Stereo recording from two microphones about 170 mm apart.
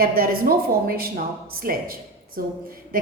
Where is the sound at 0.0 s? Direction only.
60° right (ahead or behind).